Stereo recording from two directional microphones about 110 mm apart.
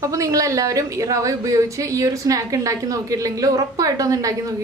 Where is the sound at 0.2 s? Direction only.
30° right (ahead or behind).